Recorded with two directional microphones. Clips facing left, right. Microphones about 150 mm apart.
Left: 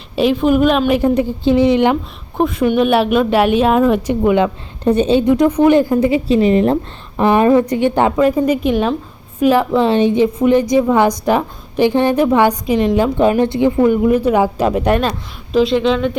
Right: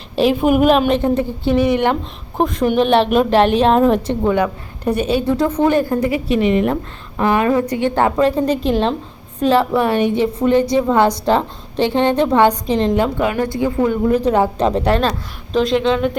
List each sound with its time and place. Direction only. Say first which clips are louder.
0.2 s a woman's voice: left 1 dB; 5° right (ahead or behind)
1.1 s a woman's voice: left 3 dB; 20° left (ahead or behind)
2.4 s a woman's voice: left 2 dB; 5° left (ahead or behind)
4.4 s a woman's voice: left 3 dB; 20° left (ahead or behind)
13.1 s a woman's voice: left 5 dB; 20° left (ahead or behind)
15.5 s a woman's voice: left 2 dB; centre (ahead or behind)